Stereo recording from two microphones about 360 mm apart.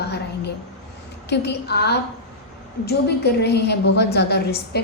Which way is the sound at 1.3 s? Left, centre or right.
Left.